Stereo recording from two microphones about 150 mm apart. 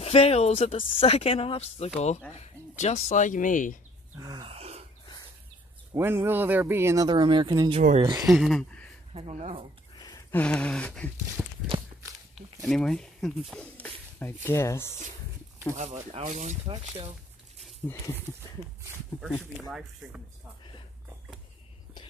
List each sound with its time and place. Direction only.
0.0 s speech: 45° left (ahead or behind); by 3.7 s 60° left (ahead or behind)
4.2 s a sound: 30° right (ahead or behind)
5.9 s speech: 15° right (ahead or behind)
7.1 s speech: 30° right (ahead or behind)
8.3 s speech: centre (ahead or behind)
9.1 s speech: 45° right (ahead or behind)
9.9 s a sound: 25° left (ahead or behind)
10.3 s a sound: 10° left (ahead or behind)
11.4 s speech: 10° right (ahead or behind)
12.6 s speech: 5° left (ahead or behind)
13.7 s speech: 15° left (ahead or behind)
15.7 s speech: 50° right (ahead or behind)
16.6 s speech: 40° right (ahead or behind)
17.8 s a sound: 15° left (ahead or behind)